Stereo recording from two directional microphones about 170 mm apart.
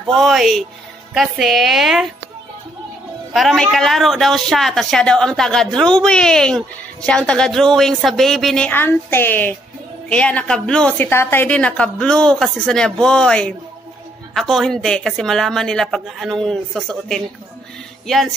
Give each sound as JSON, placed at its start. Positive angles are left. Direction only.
{"t": 0.1, "sound": "a woman's voice", "side_deg": 0}
{"t": 3.3, "sound": "a woman's voice", "side_deg": 0}